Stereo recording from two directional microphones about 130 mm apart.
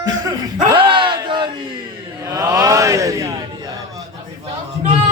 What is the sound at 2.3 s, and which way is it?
Mantra, 25° right (ahead or behind).